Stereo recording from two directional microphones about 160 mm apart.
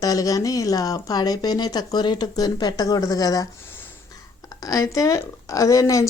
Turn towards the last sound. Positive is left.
turn(degrees=20)  # may be behind; listen again after turning